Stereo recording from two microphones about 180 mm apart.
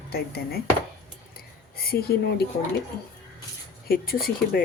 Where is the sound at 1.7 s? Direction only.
55° left (ahead or behind).